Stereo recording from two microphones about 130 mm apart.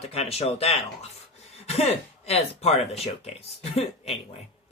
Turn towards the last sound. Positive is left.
turn(degrees=55)  # may be behind; listen again after turning